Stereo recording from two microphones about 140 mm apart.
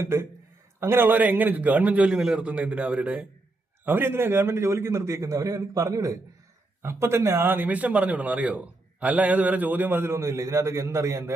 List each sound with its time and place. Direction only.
0.0 s a man's voice: 20° right (ahead or behind)